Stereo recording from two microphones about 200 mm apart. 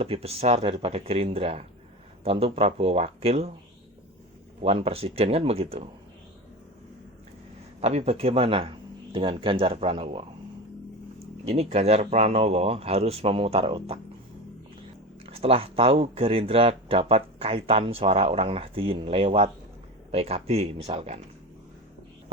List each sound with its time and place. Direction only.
0.0 s speech: 30° right (ahead or behind)
4.6 s speech: 30° right (ahead or behind)
7.8 s speech: 30° right (ahead or behind)
11.4 s speech: 30° right (ahead or behind)
15.3 s speech: 30° right (ahead or behind)